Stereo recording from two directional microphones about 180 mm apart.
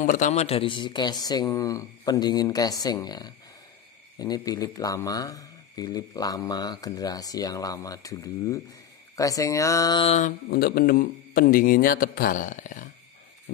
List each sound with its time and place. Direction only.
0.0 s speech: 45° left (ahead or behind); by 10.0 s 20° left (ahead or behind)
10.0 s speech: 40° left (ahead or behind)
10.5 s a man's voice: 55° left (ahead or behind)